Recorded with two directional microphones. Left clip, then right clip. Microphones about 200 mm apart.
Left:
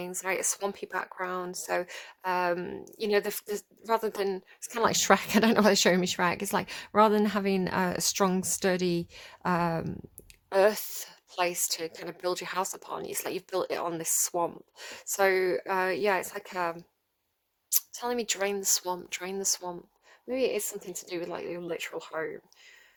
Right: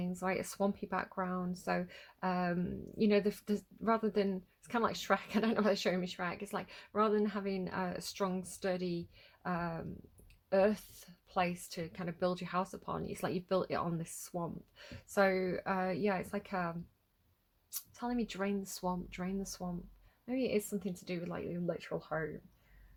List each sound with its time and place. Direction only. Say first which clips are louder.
0.0 s a woman's voice: left 6 dB; 35° left (ahead or behind)
20.9 s a woman's voice: left 7 dB; 45° left (ahead or behind)